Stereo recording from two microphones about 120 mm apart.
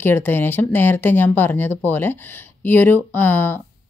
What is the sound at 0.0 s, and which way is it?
Speech, 15° left (ahead or behind).